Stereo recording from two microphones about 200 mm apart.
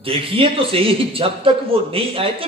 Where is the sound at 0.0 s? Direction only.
25° right (ahead or behind).